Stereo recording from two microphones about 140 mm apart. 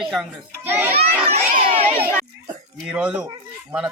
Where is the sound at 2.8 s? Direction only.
5° right (ahead or behind).